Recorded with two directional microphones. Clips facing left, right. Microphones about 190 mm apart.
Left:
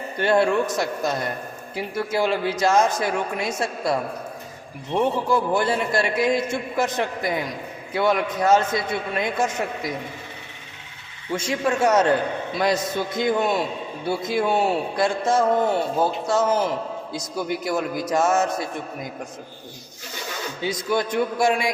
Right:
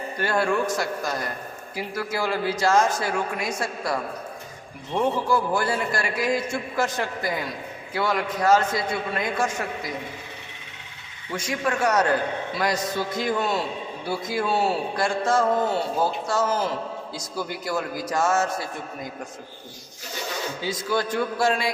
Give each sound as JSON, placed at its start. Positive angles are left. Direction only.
{"t": 0.2, "sound": "a man's voice", "side_deg": 25}
{"t": 11.3, "sound": "a man's voice", "side_deg": 25}
{"t": 20.6, "sound": "a man's voice", "side_deg": 20}